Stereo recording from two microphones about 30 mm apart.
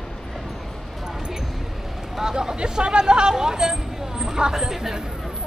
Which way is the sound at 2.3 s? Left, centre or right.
Right.